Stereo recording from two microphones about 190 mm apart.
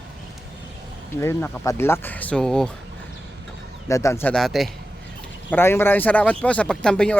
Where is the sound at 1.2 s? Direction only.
15° left (ahead or behind).